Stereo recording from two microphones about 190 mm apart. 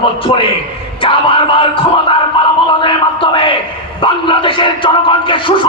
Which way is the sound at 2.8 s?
25° left (ahead or behind).